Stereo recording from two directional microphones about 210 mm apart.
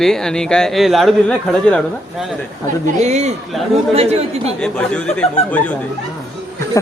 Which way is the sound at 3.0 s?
35° right (ahead or behind).